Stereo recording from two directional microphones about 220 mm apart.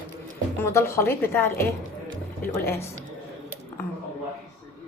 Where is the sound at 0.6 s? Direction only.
10° left (ahead or behind).